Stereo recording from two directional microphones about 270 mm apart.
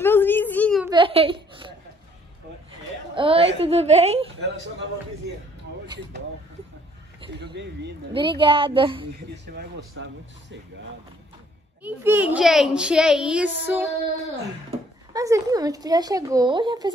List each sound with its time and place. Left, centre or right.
0.0 s a sound: centre
0.8 s a sound: centre
3.2 s a woman's voice: right
7.2 s speech: right
8.1 s a woman's voice: centre
9.3 s speech: right
11.8 s a child's voice: centre